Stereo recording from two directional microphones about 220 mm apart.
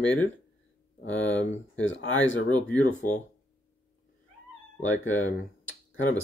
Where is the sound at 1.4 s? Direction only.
55° left (ahead or behind).